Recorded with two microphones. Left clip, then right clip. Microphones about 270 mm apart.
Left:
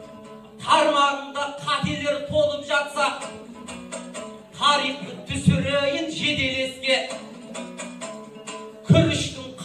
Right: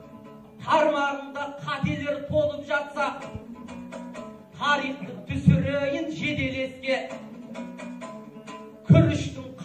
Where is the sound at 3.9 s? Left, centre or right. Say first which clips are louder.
Left 4 dB; left.